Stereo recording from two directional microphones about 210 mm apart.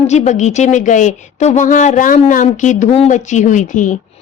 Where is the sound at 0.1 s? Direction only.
35° left (ahead or behind).